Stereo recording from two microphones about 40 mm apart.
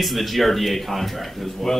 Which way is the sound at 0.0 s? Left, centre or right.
Centre.